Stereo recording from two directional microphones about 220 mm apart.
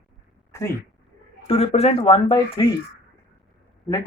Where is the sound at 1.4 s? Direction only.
25° left (ahead or behind).